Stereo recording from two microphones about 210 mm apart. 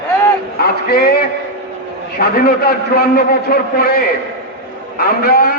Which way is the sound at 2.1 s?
45° left (ahead or behind).